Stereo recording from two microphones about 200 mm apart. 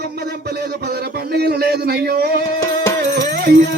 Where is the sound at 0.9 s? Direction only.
55° right (ahead or behind).